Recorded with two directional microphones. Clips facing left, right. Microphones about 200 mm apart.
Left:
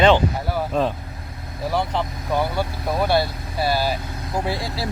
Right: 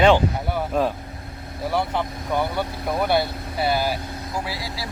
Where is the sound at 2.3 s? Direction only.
Centre (ahead or behind).